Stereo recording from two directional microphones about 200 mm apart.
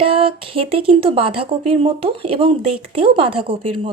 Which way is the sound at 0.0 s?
25° right (ahead or behind).